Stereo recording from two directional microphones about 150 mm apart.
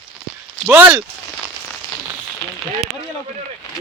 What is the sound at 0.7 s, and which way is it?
Speech, 10° right (ahead or behind).